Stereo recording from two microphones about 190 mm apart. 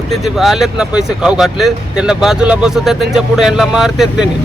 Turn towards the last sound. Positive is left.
turn(degrees=0)  # may be behind; listen again after turning